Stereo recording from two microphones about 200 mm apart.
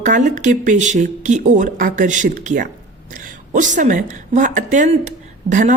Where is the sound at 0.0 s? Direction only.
40° right (ahead or behind).